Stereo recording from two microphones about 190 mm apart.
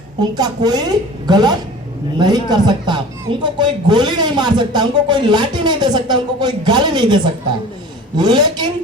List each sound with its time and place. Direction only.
0.2 s a man's voice: 20° right (ahead or behind)